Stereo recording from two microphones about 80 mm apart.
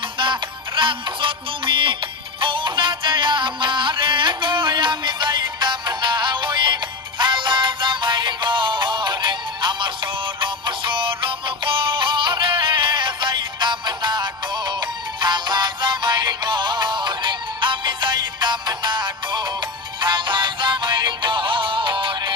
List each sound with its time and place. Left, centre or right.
0.8 s music: right
20.0 s music: right